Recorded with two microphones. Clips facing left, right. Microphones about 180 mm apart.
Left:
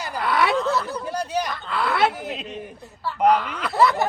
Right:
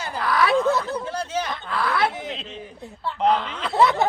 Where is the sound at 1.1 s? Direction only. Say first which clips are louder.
Left 5 dB; 15° left (ahead or behind).